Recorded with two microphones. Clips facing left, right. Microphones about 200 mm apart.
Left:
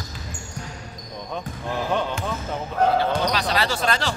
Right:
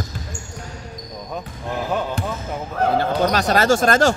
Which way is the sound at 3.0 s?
50° right (ahead or behind).